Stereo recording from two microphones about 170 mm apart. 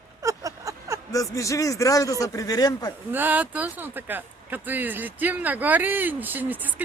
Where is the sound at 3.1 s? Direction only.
10° right (ahead or behind).